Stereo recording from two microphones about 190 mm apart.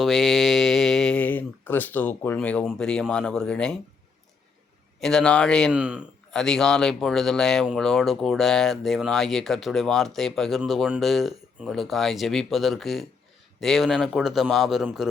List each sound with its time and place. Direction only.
0.0 s speech: centre (ahead or behind)
4.9 s a man's voice: centre (ahead or behind)